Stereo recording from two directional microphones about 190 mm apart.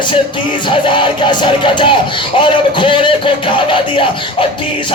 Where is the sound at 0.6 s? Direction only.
25° left (ahead or behind).